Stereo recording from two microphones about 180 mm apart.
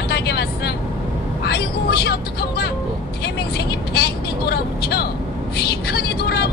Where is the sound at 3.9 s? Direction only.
65° left (ahead or behind).